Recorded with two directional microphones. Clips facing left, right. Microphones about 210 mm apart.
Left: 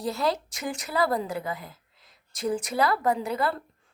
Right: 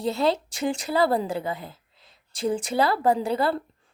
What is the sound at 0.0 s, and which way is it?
Speech, 25° right (ahead or behind).